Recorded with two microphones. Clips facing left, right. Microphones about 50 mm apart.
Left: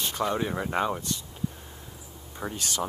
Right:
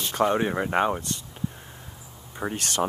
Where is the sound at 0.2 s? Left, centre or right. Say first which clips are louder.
Right 6 dB; right.